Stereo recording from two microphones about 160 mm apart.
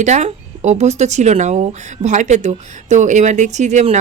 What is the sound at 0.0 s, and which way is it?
Speech, 45° right (ahead or behind).